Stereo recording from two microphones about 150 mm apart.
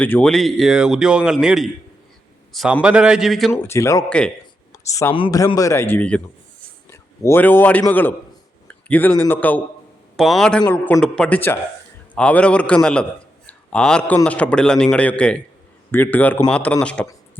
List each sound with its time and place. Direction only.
0.0 s a man's voice: 10° left (ahead or behind)
3.6 s a man's voice: 20° left (ahead or behind)
10.2 s a man's voice: centre (ahead or behind)
10.7 s a man's voice: 15° left (ahead or behind)